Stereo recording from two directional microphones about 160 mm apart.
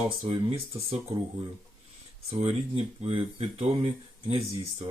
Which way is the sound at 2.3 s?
35° right (ahead or behind).